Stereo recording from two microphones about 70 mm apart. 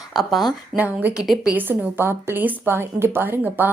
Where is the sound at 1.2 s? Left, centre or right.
Centre.